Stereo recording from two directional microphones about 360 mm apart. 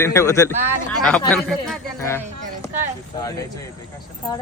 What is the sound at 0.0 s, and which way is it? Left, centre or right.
Speech, centre.